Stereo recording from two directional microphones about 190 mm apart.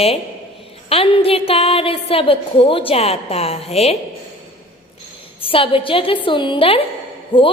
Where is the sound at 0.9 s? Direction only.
30° left (ahead or behind).